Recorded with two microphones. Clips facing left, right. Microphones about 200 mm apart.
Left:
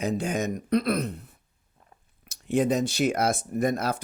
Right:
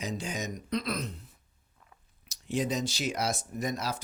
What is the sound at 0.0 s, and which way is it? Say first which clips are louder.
Speech: left 8 dB; 55° left (ahead or behind).